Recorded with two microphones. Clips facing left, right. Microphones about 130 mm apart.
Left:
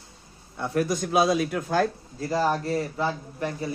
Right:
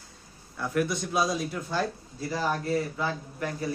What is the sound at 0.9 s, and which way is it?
A man's voice, 50° left (ahead or behind).